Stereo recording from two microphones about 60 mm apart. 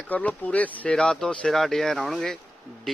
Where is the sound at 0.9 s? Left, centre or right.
Centre.